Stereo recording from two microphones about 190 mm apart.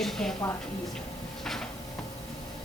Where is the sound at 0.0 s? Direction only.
Centre (ahead or behind).